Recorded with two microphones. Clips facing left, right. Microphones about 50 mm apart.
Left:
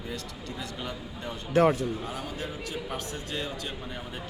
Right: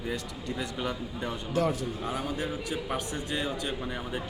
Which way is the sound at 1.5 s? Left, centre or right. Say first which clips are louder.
Left 6 dB; left.